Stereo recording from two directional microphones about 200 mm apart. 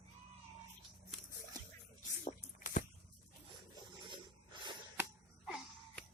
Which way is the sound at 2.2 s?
40° left (ahead or behind).